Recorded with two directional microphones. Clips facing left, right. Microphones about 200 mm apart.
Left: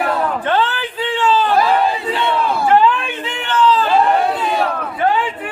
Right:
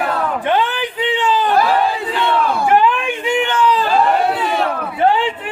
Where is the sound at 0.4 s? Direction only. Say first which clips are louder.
Right 1 dB; 15° right (ahead or behind).